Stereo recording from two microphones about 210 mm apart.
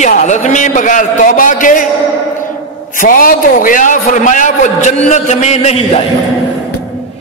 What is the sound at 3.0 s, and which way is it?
A man's voice, 40° left (ahead or behind).